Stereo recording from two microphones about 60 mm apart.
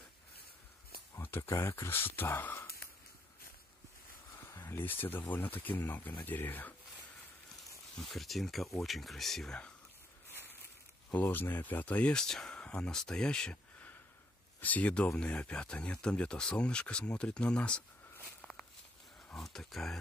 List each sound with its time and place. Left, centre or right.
1.2 s a sound: left
1.7 s speech: left
4.6 s speech: left
8.0 s speech: centre
11.2 s speech: left
12.1 s speech: centre
14.6 s speech: left
19.3 s speech: centre